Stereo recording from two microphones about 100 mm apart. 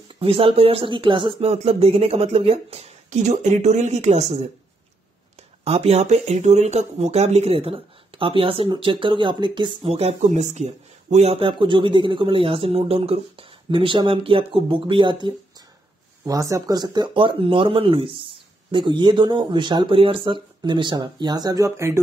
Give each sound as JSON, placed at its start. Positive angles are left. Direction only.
{"t": 0.1, "sound": "speech", "side_deg": -65}
{"t": 1.4, "sound": "speech", "side_deg": -90}
{"t": 3.8, "sound": "speech", "side_deg": -90}
{"t": 5.6, "sound": "speech", "side_deg": -90}
{"t": 9.8, "sound": "speech", "side_deg": -90}
{"t": 16.3, "sound": "speech", "side_deg": -35}